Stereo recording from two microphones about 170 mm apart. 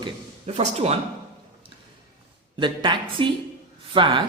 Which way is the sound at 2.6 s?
30° right (ahead or behind).